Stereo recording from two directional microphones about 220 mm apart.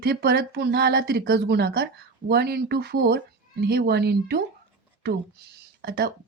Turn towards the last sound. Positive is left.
turn(degrees=-45)  # may be behind; listen again after turning